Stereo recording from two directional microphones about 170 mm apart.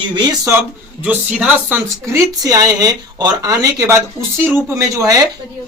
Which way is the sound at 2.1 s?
20° right (ahead or behind).